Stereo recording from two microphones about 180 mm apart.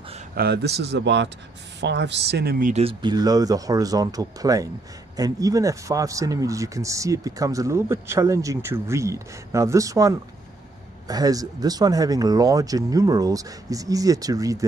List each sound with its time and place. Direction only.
0.4 s a woman's voice: 65° right (ahead or behind)
2.7 s speech: 30° right (ahead or behind)